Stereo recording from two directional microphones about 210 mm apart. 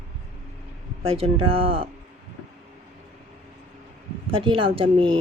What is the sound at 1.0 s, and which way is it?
Speech, 25° right (ahead or behind).